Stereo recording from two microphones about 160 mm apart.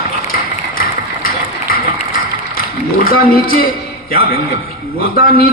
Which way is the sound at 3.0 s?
65° left (ahead or behind).